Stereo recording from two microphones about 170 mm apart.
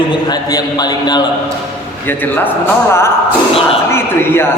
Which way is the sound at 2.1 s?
10° left (ahead or behind).